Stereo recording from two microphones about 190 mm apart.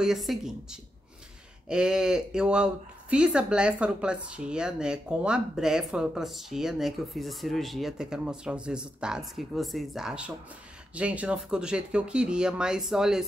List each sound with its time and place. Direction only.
0.0 s speech: centre (ahead or behind)